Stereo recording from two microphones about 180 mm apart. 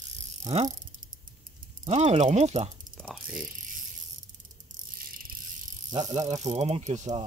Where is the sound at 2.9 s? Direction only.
5° right (ahead or behind).